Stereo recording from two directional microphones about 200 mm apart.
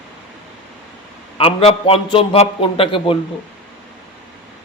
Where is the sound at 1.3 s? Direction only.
30° left (ahead or behind).